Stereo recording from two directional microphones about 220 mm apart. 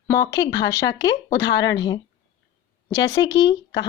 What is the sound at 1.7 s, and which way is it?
Speech, 20° left (ahead or behind).